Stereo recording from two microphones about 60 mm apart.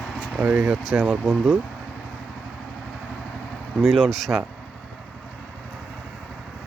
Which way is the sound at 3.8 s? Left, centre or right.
Centre.